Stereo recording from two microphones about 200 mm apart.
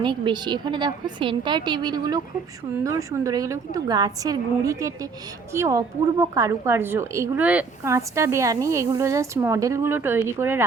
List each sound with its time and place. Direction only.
0.0 s a woman's voice: 25° right (ahead or behind)